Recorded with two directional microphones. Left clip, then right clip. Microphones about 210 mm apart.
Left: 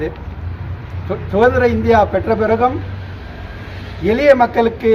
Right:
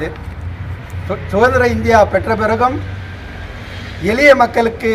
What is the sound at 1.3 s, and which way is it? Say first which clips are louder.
A man's voice: right 1 dB; 15° right (ahead or behind).